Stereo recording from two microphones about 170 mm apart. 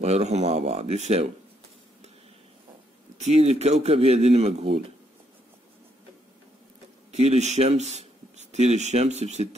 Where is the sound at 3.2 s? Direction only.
40° right (ahead or behind).